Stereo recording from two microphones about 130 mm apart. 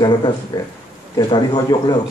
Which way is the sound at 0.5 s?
30° left (ahead or behind).